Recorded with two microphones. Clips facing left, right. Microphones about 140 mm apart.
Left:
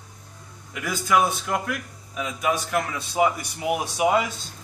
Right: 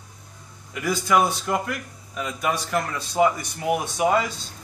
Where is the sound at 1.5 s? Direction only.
Centre (ahead or behind).